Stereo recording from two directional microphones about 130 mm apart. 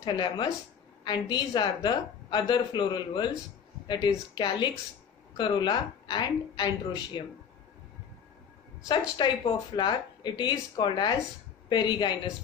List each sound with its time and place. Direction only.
0.0 s a woman's voice: 35° left (ahead or behind)
9.2 s a woman's voice: 35° left (ahead or behind)